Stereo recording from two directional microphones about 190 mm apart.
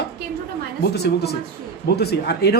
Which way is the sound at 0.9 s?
60° left (ahead or behind).